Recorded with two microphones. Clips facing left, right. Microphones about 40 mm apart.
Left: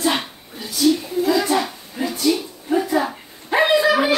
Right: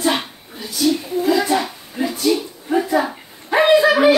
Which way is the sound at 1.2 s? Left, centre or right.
Centre.